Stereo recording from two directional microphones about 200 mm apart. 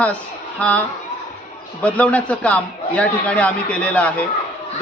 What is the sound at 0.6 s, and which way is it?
A man's voice, 5° left (ahead or behind).